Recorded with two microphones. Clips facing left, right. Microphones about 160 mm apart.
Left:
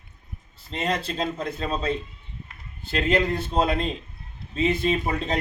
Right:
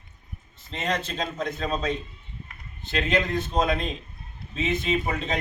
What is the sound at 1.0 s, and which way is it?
Speech, 35° left (ahead or behind).